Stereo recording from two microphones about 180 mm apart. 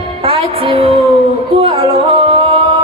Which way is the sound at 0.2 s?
30° right (ahead or behind).